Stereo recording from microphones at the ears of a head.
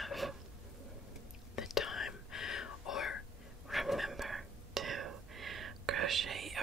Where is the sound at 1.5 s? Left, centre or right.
Left.